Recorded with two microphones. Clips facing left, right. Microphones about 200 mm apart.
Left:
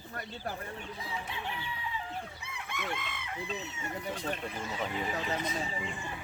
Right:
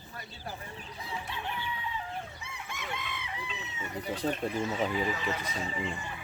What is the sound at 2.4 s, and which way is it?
Chicken, 55° left (ahead or behind).